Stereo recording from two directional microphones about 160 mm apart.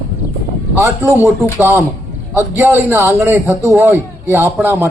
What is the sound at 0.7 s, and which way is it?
A man's voice, 20° right (ahead or behind).